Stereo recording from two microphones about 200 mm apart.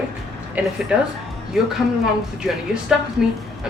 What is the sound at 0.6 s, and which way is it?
Speech, 10° right (ahead or behind).